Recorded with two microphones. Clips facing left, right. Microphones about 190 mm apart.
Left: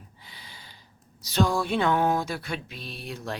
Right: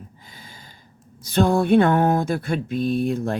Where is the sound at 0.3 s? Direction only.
45° right (ahead or behind).